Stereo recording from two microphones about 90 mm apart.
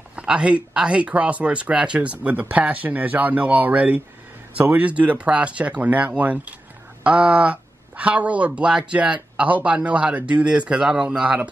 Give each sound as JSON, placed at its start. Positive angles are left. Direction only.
{"t": 0.1, "sound": "speech", "side_deg": -10}